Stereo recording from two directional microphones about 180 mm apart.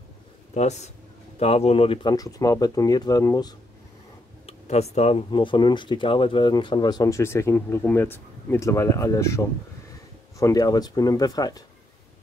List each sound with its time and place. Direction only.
0.6 s speech: 40° left (ahead or behind); by 3.5 s 20° left (ahead or behind)
4.5 s speech: 35° left (ahead or behind); by 11.6 s 20° left (ahead or behind)